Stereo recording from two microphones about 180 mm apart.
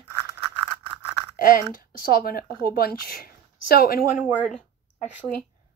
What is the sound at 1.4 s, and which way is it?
Speech, 50° left (ahead or behind).